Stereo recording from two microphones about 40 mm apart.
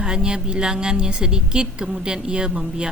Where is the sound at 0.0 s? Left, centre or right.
Right.